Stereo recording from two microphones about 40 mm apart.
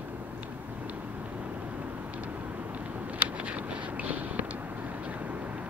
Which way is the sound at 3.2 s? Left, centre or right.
Right.